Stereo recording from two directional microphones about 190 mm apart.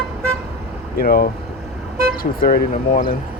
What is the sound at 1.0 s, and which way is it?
Speech, 50° left (ahead or behind).